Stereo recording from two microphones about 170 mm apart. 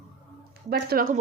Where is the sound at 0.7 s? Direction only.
65° right (ahead or behind).